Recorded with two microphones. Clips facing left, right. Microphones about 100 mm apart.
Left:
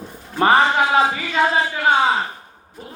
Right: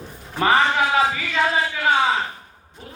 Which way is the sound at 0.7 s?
30° left (ahead or behind).